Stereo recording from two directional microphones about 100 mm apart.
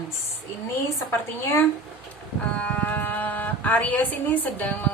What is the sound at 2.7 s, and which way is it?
Speech, 15° left (ahead or behind).